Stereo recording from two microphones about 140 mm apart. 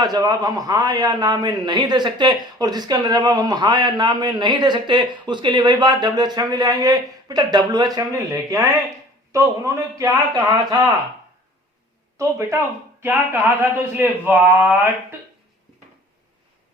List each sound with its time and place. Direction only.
0.0 s a man's voice: 30° right (ahead or behind)
10.0 s a man's voice: 25° right (ahead or behind)
12.1 s a man's voice: 20° right (ahead or behind)